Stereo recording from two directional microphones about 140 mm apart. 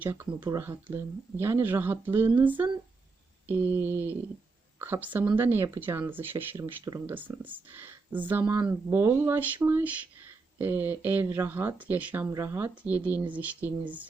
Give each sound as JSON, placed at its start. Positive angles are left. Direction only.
{"t": 0.0, "sound": "speech", "side_deg": -15}
{"t": 0.3, "sound": "speech", "side_deg": -30}
{"t": 0.6, "sound": "speech", "side_deg": -15}
{"t": 6.6, "sound": "speech", "side_deg": -25}
{"t": 7.1, "sound": "speech", "side_deg": -15}